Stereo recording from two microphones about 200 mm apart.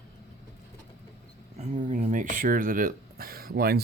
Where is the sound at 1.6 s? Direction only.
35° right (ahead or behind).